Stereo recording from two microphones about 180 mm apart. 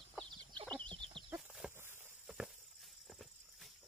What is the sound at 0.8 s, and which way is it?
Fowl, 30° right (ahead or behind).